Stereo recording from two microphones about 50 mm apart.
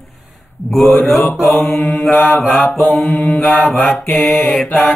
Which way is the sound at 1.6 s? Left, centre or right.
Left.